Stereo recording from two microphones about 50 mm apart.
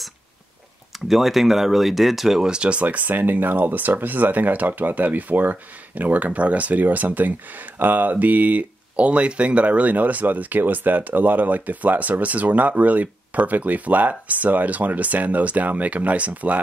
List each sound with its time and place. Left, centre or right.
1.0 s speech: centre; by 16.6 s right